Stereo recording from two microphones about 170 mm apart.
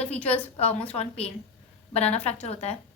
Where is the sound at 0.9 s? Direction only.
35° left (ahead or behind).